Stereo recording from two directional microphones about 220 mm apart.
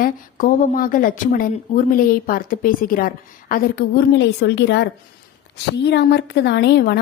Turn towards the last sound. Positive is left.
turn(degrees=45)  # may be behind; listen again after turning